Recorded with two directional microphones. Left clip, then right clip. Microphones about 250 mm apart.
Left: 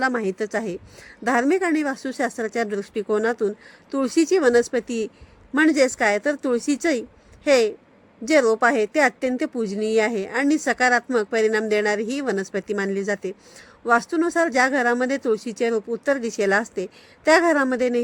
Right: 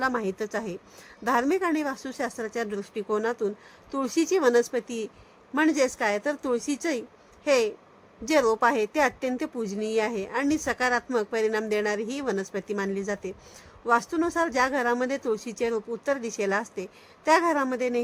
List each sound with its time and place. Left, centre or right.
0.0 s a woman's voice: centre